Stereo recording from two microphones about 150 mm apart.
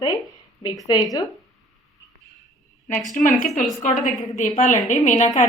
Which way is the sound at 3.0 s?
Centre (ahead or behind).